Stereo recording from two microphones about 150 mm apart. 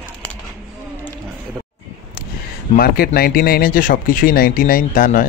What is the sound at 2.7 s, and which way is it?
Speech, 90° left.